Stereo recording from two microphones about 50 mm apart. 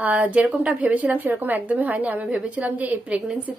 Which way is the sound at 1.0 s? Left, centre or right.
Right.